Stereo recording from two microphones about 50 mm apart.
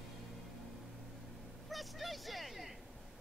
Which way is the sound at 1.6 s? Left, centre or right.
Centre.